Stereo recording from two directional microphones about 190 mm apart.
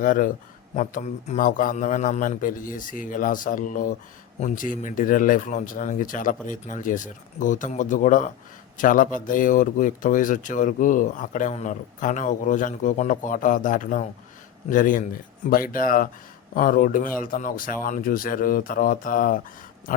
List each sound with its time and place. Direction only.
0.0 s speech: 45° left (ahead or behind)